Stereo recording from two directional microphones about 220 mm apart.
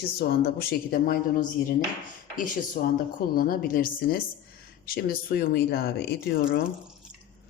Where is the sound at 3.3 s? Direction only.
40° left (ahead or behind).